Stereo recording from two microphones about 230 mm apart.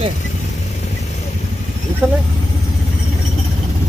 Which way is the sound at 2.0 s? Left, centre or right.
Centre.